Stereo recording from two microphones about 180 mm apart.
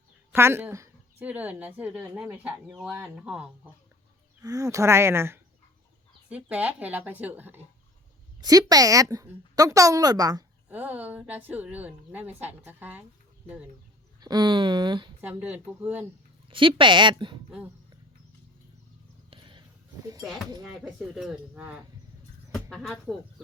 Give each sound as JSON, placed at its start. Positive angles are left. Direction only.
{"t": 0.3, "sound": "a woman's voice", "side_deg": -15}
{"t": 4.4, "sound": "a woman's voice", "side_deg": -20}
{"t": 10.7, "sound": "a woman's voice", "side_deg": -10}
{"t": 14.2, "sound": "a woman's voice", "side_deg": -25}
{"t": 15.2, "sound": "a woman's voice", "side_deg": -10}
{"t": 16.5, "sound": "a woman's voice", "side_deg": -30}
{"t": 19.3, "sound": "a sound", "side_deg": -25}
{"t": 20.7, "sound": "speech", "side_deg": -5}